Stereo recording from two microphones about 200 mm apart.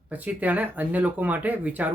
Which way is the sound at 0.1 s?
5° right (ahead or behind).